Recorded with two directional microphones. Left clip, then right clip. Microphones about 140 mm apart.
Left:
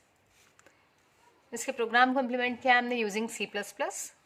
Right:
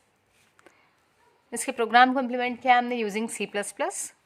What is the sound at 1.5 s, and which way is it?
A woman's voice, 45° right (ahead or behind).